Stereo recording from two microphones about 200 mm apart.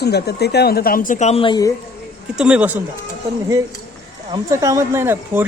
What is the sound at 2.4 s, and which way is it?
Speech, 5° right (ahead or behind).